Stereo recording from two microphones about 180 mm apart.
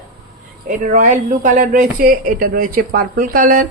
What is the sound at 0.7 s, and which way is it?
A woman's voice, 45° right (ahead or behind).